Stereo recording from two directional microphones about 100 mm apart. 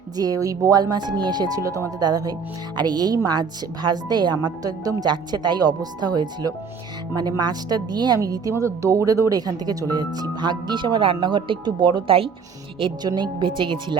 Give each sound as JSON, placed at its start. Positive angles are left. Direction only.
{"t": 0.2, "sound": "a woman's voice", "side_deg": -40}
{"t": 12.8, "sound": "a woman's voice", "side_deg": -45}